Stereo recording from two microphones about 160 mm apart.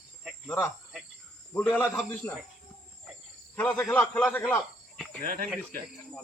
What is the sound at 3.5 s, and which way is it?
Speech, 5° left (ahead or behind).